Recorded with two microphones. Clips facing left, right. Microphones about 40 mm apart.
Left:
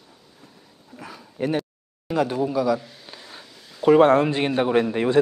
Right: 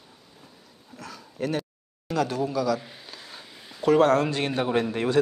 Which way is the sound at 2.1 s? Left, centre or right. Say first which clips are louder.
Left 3 dB; centre.